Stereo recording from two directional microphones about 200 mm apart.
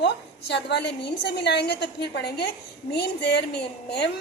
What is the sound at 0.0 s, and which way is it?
A woman's voice, 60° left (ahead or behind).